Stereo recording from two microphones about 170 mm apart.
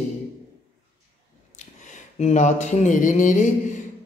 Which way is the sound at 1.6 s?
45° left (ahead or behind).